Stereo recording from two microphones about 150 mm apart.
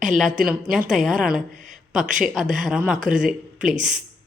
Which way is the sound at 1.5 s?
55° right (ahead or behind).